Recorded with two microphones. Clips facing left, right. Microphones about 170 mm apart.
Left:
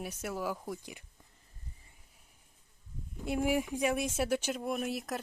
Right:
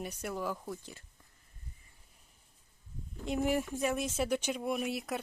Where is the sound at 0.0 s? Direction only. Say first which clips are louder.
Even; 5° left (ahead or behind).